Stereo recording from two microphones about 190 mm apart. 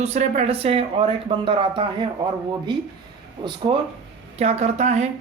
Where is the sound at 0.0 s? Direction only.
35° right (ahead or behind).